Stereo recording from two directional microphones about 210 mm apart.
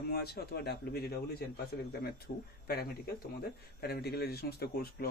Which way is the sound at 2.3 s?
35° left (ahead or behind).